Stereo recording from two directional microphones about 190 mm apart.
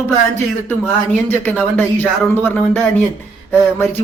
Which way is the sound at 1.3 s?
10° left (ahead or behind).